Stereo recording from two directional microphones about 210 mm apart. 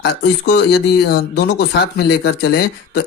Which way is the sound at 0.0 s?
55° left (ahead or behind).